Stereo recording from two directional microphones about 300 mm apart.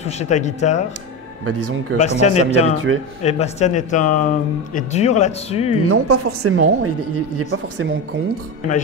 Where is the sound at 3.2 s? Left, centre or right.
Left.